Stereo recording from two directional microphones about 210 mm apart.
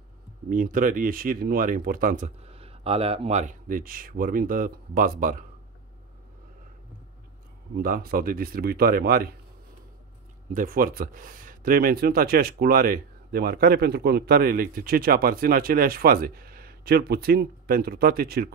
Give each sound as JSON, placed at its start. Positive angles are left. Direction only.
{"t": 0.5, "sound": "speech", "side_deg": -40}
{"t": 7.7, "sound": "speech", "side_deg": -45}
{"t": 10.5, "sound": "speech", "side_deg": -40}